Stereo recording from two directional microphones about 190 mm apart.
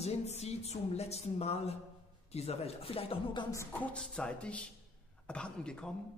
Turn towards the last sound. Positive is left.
turn(degrees=5)  # may be behind; listen again after turning